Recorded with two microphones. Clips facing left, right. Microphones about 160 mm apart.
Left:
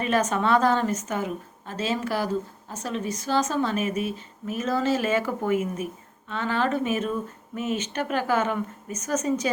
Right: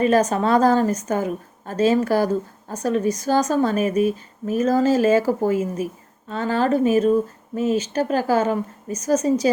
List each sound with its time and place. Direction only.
0.0 s a woman's voice: 35° right (ahead or behind)